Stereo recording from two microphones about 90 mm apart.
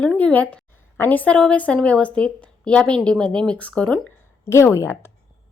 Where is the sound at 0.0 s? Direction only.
10° left (ahead or behind).